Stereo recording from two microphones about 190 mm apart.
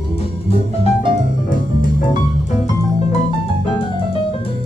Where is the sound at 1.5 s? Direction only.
45° left (ahead or behind).